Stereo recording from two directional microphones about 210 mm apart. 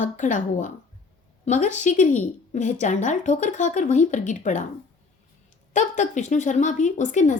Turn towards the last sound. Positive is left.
turn(degrees=35)  # may be behind; listen again after turning